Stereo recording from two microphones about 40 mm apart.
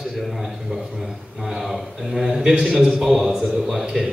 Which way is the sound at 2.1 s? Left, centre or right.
Centre.